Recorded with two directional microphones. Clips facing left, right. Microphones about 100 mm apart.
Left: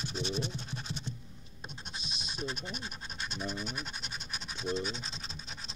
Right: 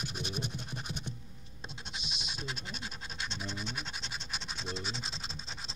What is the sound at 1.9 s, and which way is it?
Scratch, 35° left (ahead or behind).